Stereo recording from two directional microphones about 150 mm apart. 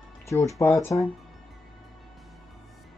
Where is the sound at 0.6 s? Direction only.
15° left (ahead or behind).